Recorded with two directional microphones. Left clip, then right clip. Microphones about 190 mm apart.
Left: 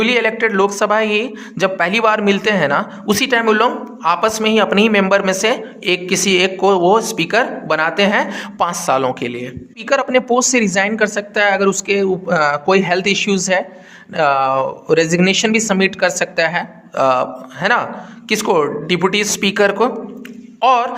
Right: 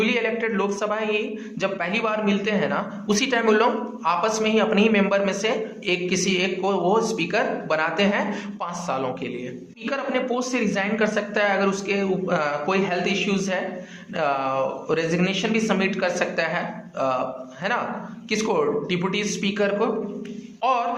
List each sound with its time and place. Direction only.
0.0 s speech: 45° left (ahead or behind)
9.9 s speech: 55° left (ahead or behind)